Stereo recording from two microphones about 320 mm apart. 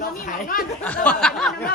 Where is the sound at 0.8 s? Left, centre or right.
Centre.